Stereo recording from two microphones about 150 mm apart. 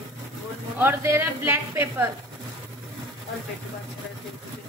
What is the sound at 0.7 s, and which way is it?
A woman's voice, 15° right (ahead or behind).